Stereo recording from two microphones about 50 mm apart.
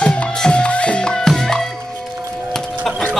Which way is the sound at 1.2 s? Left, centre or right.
Centre.